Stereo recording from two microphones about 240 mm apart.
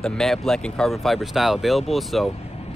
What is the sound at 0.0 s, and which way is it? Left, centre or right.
Speech, centre.